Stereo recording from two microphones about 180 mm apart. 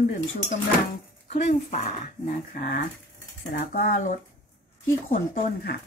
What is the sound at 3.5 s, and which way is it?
Speech, 50° left (ahead or behind).